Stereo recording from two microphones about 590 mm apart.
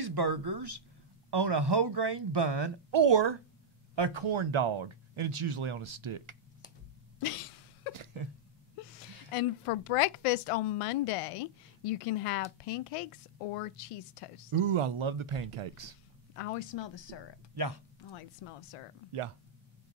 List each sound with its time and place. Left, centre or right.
0.0 s speech: right
7.2 s cough: left
8.0 s a sound: right
9.3 s a woman's voice: left
14.5 s speech: right
16.3 s speech: left
17.6 s speech: right
18.4 s speech: left